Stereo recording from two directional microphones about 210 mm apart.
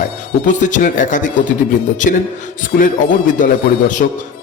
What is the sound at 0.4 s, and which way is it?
A man's voice, 35° left (ahead or behind).